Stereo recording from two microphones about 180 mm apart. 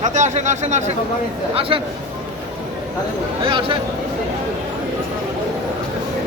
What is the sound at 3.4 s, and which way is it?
Speech, 30° right (ahead or behind).